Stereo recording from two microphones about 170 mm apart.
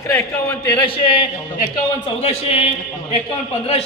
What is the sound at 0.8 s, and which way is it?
A man's voice, 30° left (ahead or behind).